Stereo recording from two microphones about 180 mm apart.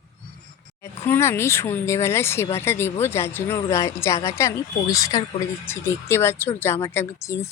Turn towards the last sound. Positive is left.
turn(degrees=15)  # may be behind; listen again after turning